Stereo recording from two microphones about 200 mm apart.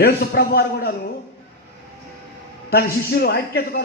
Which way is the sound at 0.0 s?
50° left (ahead or behind).